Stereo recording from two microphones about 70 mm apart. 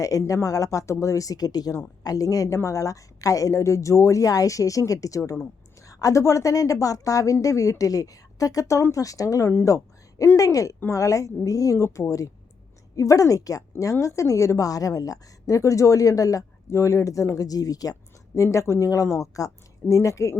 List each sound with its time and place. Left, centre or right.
0.0 s a woman's voice: left
9.6 s a sound: left
10.3 s a woman's voice: left
18.3 s a woman's voice: left